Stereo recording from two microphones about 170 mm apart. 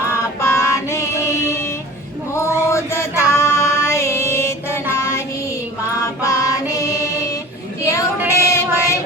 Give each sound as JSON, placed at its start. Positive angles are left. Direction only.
{"t": 0.1, "sound": "music", "side_deg": 15}
{"t": 2.3, "sound": "a sound", "side_deg": 15}
{"t": 4.9, "sound": "child singing", "side_deg": 15}
{"t": 6.2, "sound": "music", "side_deg": 20}
{"t": 8.4, "sound": "child singing", "side_deg": 15}